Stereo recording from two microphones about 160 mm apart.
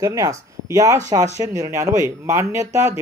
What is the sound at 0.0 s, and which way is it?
Speech, 20° right (ahead or behind).